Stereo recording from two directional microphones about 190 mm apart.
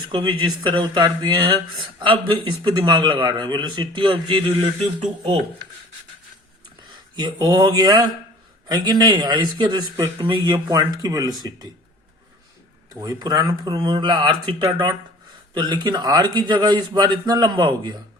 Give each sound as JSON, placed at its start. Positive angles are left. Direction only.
{"t": 0.1, "sound": "speech", "side_deg": -25}
{"t": 7.2, "sound": "speech", "side_deg": -20}
{"t": 13.0, "sound": "speech", "side_deg": -20}